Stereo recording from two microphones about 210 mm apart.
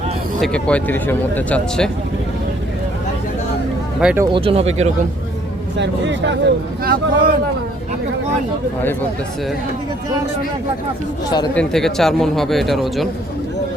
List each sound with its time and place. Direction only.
0.4 s speech: 5° left (ahead or behind)
4.0 s speech: 10° right (ahead or behind)
4.3 s speech: 25° right (ahead or behind)
5.7 s speech: 60° right (ahead or behind)
6.8 s speech: 45° right (ahead or behind)
11.5 s speech: centre (ahead or behind)